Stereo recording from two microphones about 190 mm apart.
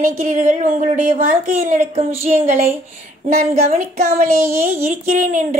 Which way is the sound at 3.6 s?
40° right (ahead or behind).